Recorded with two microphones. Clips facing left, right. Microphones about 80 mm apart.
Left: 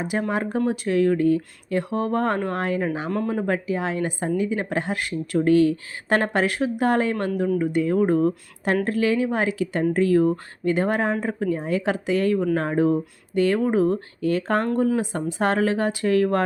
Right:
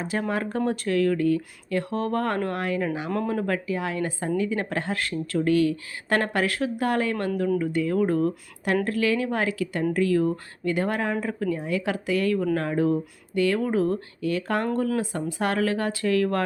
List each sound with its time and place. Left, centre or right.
0.0 s speech: centre
0.9 s speech: left
3.2 s speech: centre
5.4 s speech: left
14.2 s speech: left